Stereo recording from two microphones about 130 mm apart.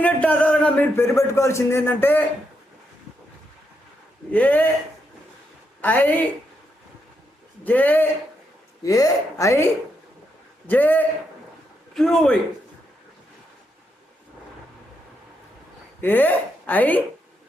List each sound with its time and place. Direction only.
0.0 s a man's voice: 10° left (ahead or behind)
4.3 s speech: 15° left (ahead or behind)
5.8 s speech: 15° left (ahead or behind)
7.6 s speech: 15° left (ahead or behind)
8.8 s speech: 25° left (ahead or behind)
10.7 s speech: 15° left (ahead or behind)
11.9 s a man's voice: 5° left (ahead or behind)
16.0 s a woman's voice: 15° left (ahead or behind)